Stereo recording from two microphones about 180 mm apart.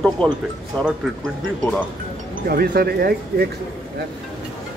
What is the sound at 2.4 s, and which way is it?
Speech, 60° right (ahead or behind).